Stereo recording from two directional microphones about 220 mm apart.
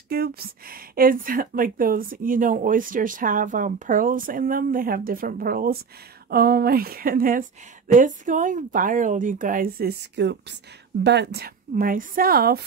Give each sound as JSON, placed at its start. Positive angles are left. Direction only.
{"t": 0.1, "sound": "a woman's voice", "side_deg": -45}